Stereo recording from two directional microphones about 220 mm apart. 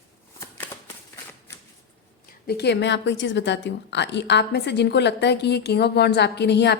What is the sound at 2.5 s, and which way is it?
A woman's voice, 50° left (ahead or behind).